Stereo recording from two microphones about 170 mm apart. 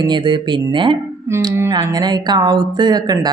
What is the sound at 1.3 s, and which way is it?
Speech, 15° right (ahead or behind).